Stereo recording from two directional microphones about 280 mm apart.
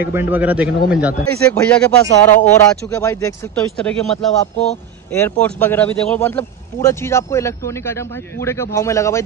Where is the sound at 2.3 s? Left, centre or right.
Left.